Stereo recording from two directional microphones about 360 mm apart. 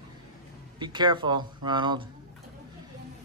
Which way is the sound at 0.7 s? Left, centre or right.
Centre.